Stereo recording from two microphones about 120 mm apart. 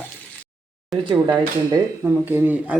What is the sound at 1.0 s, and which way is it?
Speech, 35° right (ahead or behind).